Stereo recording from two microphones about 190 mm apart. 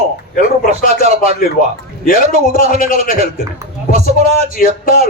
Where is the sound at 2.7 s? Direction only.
45° left (ahead or behind).